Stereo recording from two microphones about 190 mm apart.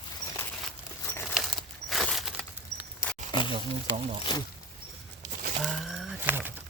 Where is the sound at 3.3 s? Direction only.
25° left (ahead or behind).